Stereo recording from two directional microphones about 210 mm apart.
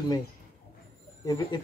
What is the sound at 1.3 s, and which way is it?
Speech, 20° left (ahead or behind).